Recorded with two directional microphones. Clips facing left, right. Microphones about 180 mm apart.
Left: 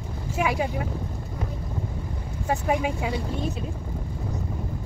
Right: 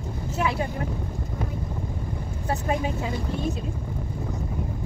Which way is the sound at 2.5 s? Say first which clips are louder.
Left 2 dB; 10° left (ahead or behind).